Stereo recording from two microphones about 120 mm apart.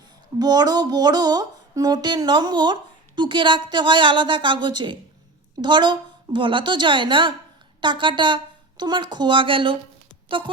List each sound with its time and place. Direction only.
0.3 s music: 35° right (ahead or behind)
10.2 s speech: 45° right (ahead or behind)